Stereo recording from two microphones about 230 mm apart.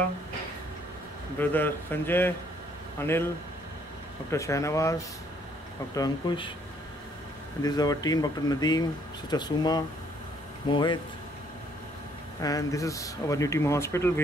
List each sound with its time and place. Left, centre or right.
1.4 s a man's voice: centre
4.3 s a man's voice: centre
7.6 s a man's voice: centre
12.4 s a man's voice: centre